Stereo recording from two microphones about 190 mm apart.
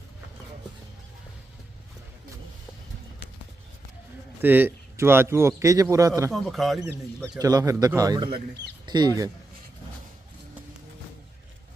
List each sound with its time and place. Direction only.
4.4 s a man's voice: 10° right (ahead or behind)
6.3 s speech: centre (ahead or behind)
7.3 s a man's voice: 20° right (ahead or behind)